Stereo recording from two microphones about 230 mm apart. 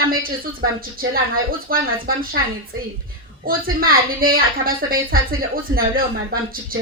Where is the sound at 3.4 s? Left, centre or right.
Right.